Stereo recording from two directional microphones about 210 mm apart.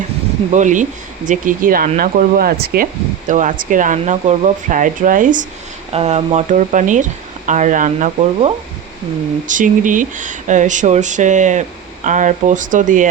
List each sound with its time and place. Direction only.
0.5 s speech: 35° right (ahead or behind)